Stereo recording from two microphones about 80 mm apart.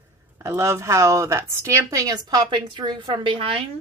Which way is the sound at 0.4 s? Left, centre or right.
Right.